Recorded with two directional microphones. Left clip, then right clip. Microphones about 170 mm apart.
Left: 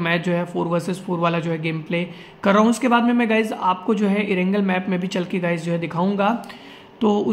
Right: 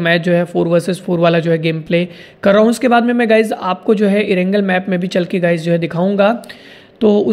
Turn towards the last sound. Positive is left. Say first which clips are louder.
# right 8 dB
turn(degrees=-25)  # may be behind; listen again after turning